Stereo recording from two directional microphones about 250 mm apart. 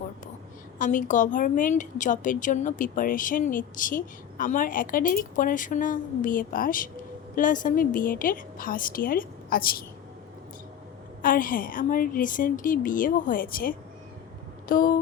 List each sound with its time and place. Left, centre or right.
0.8 s a woman's voice: left
11.2 s a woman's voice: left